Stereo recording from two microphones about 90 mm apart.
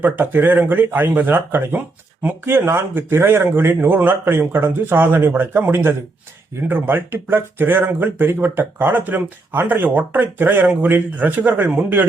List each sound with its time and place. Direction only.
0.0 s speech: 20° right (ahead or behind)